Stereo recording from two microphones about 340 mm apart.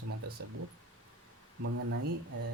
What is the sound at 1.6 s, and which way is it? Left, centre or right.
Speech, right.